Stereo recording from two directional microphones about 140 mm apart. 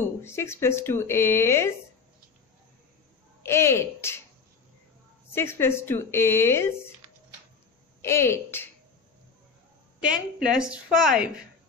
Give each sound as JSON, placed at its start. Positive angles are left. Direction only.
{"t": 0.2, "sound": "speech", "side_deg": 20}
{"t": 3.4, "sound": "speech", "side_deg": 20}
{"t": 5.3, "sound": "a woman's voice", "side_deg": 15}
{"t": 8.0, "sound": "speech", "side_deg": 20}
{"t": 10.0, "sound": "a woman's voice", "side_deg": -5}